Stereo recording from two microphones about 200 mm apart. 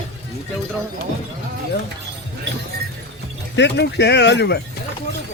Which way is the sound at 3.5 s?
60° left (ahead or behind).